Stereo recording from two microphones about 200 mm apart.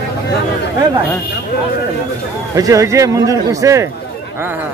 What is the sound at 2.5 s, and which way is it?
A man's voice, 15° right (ahead or behind).